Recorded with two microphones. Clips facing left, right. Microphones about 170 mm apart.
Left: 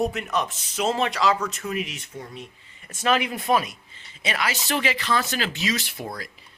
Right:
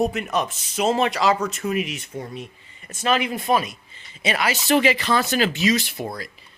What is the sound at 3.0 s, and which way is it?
Speech, 5° left (ahead or behind).